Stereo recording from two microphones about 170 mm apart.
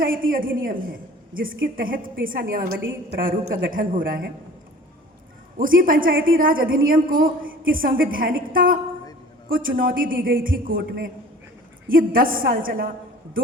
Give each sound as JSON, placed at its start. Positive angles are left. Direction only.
{"t": 0.0, "sound": "a woman's voice", "side_deg": -55}
{"t": 3.5, "sound": "a woman's voice", "side_deg": -55}
{"t": 5.5, "sound": "a woman's voice", "side_deg": -55}